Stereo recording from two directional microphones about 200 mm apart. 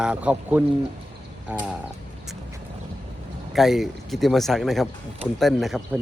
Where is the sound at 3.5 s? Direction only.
Centre (ahead or behind).